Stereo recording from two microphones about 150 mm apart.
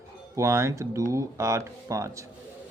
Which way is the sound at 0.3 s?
20° right (ahead or behind).